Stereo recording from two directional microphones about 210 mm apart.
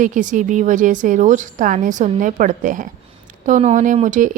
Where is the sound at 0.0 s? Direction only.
40° right (ahead or behind).